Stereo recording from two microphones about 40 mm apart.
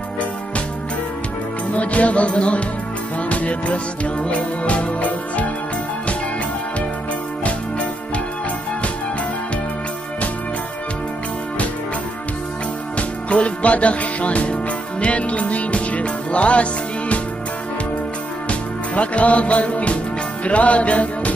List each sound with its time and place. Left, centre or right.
1.7 s music: left
12.9 s music: left
18.5 s music: left